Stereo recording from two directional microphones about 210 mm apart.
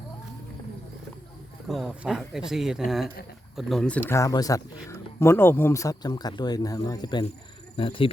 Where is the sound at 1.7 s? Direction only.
Centre (ahead or behind).